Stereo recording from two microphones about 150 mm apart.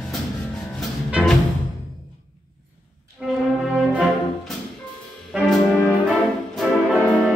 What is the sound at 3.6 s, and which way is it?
Music, centre (ahead or behind).